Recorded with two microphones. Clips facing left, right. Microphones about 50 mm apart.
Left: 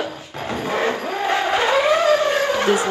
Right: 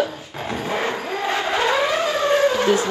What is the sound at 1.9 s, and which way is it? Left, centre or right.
Music, left.